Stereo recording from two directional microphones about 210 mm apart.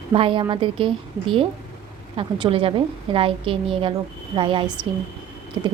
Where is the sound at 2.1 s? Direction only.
25° right (ahead or behind).